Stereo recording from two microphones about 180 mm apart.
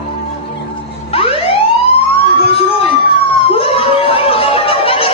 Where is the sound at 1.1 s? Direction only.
30° left (ahead or behind).